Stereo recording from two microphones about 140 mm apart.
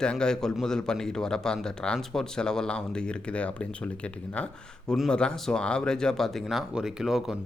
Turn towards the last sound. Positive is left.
turn(degrees=-5)  # may be behind; listen again after turning